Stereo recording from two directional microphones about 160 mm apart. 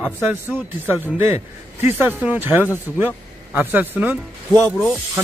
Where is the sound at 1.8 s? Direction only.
10° right (ahead or behind).